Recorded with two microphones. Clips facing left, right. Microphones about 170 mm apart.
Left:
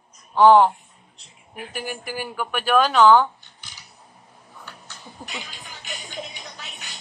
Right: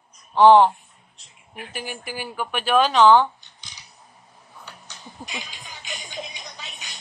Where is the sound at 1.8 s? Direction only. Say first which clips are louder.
Left 3 dB; 45° left (ahead or behind).